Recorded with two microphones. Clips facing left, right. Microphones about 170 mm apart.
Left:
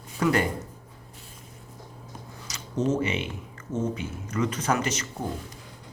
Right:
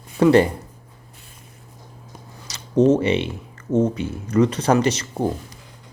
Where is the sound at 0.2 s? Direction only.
30° right (ahead or behind).